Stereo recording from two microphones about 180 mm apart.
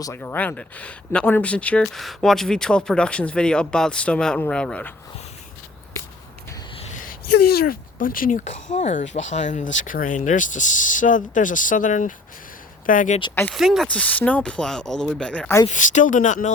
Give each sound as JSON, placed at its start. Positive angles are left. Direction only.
{"t": 0.0, "sound": "speech", "side_deg": 10}
{"t": 7.5, "sound": "speech", "side_deg": 55}
{"t": 13.5, "sound": "speech", "side_deg": 0}
{"t": 15.6, "sound": "speech", "side_deg": 45}